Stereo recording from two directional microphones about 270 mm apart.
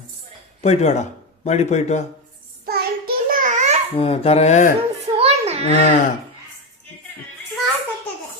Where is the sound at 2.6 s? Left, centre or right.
Right.